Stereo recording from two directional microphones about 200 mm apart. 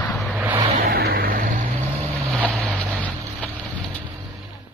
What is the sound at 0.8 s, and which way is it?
Vehicle, 50° right (ahead or behind).